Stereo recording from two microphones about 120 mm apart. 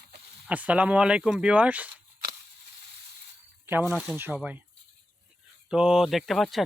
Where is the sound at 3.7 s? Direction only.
15° right (ahead or behind).